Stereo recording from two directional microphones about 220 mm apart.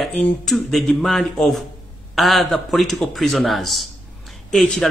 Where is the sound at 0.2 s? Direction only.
Centre (ahead or behind).